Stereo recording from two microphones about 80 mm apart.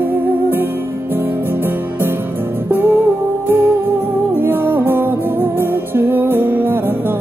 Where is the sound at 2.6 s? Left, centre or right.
Right.